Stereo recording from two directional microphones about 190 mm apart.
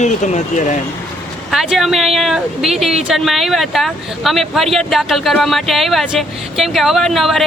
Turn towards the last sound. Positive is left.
turn(degrees=0)  # may be behind; listen again after turning